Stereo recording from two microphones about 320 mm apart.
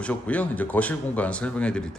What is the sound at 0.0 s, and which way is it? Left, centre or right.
A man's voice, centre.